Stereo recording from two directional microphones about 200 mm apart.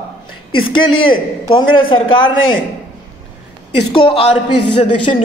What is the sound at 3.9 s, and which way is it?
A man's voice, 25° left (ahead or behind).